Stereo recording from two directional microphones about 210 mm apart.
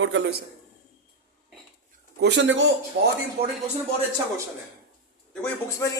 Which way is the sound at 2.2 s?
60° right (ahead or behind).